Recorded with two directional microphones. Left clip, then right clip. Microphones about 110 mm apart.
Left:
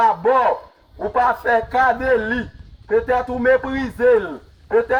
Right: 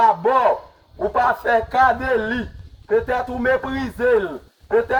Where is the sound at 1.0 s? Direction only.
15° right (ahead or behind).